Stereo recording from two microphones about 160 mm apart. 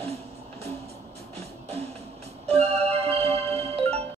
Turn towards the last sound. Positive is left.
turn(degrees=-40)  # may be behind; listen again after turning